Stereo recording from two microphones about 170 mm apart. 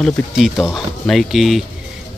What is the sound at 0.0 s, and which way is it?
Speech, centre (ahead or behind).